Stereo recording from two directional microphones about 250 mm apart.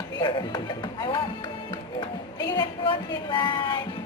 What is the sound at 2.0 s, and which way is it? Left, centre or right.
Speech, centre.